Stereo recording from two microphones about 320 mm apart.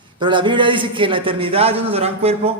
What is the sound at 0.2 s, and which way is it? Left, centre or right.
A man's voice, centre.